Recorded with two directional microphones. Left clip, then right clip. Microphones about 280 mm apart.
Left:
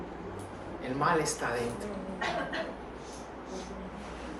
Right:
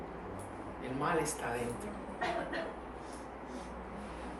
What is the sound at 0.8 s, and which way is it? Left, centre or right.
Speech, centre.